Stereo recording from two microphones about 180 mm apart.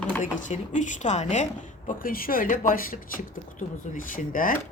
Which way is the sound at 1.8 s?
50° left (ahead or behind).